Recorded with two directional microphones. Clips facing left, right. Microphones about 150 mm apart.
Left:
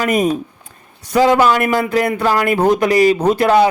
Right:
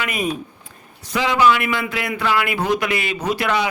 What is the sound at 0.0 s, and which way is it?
Speech, 40° left (ahead or behind).